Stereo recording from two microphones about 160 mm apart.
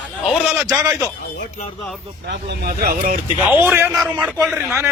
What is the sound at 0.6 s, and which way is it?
Speech, 25° right (ahead or behind).